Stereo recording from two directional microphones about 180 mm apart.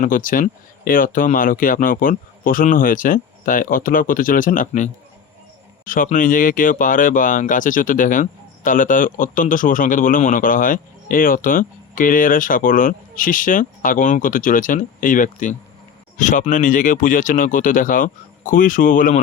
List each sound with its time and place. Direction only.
0.0 s speech: 50° left (ahead or behind)